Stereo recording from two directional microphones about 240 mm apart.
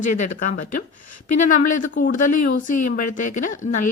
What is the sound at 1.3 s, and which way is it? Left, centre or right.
Speech, left.